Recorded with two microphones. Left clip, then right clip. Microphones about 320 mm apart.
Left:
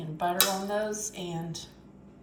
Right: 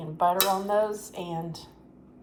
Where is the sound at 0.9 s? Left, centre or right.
Right.